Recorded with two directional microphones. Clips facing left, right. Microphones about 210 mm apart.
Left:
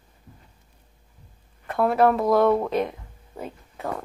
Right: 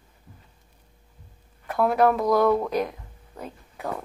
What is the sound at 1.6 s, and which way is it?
Speech, centre (ahead or behind).